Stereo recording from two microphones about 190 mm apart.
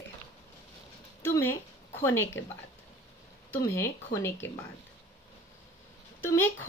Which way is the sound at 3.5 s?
15° left (ahead or behind).